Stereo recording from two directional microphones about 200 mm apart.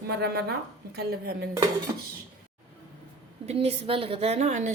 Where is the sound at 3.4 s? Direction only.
30° right (ahead or behind).